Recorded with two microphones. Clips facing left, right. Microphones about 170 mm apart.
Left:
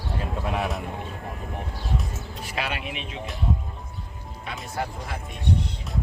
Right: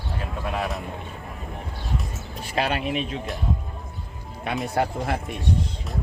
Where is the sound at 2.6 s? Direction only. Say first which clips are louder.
Right 7 dB; 35° right (ahead or behind).